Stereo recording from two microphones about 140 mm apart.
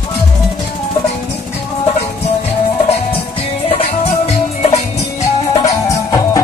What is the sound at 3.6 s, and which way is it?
Music, 45° left (ahead or behind).